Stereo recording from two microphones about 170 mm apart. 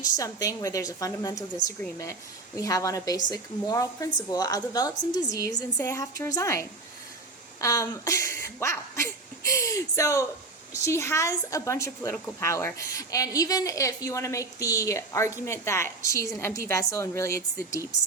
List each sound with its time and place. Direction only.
0.0 s a woman's voice: 20° left (ahead or behind)